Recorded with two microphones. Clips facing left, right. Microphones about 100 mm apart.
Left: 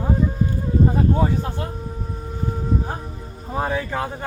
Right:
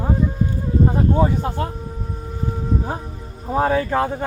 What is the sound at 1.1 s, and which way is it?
Speech, 25° right (ahead or behind).